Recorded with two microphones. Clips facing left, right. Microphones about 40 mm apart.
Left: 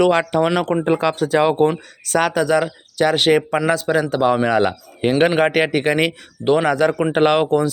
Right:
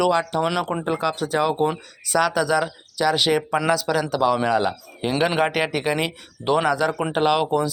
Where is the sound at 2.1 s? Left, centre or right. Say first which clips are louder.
Left 3 dB; left.